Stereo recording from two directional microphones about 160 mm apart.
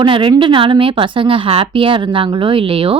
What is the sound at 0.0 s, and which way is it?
Speech, 30° right (ahead or behind).